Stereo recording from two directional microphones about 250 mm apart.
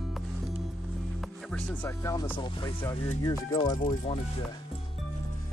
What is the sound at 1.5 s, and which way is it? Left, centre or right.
Speech, centre.